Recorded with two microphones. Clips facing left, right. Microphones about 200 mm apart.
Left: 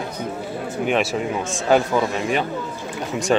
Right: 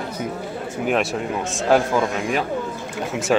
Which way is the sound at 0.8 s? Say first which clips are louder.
Left 1 dB; centre (ahead or behind).